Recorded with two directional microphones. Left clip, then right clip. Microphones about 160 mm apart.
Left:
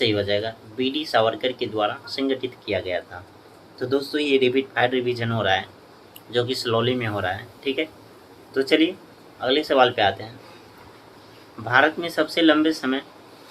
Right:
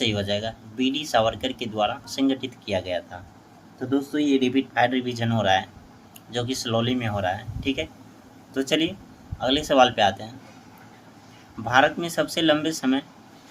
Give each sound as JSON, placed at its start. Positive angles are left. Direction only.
{"t": 0.0, "sound": "speech", "side_deg": -30}
{"t": 3.8, "sound": "speech", "side_deg": -15}
{"t": 11.7, "sound": "speech", "side_deg": -30}